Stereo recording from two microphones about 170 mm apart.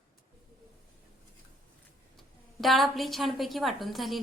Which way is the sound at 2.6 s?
Centre (ahead or behind).